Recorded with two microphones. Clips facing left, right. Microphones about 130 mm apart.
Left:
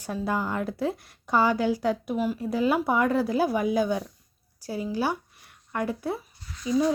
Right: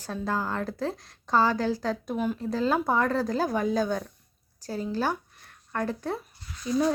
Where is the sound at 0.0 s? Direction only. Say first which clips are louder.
Left 2 dB; 15° left (ahead or behind).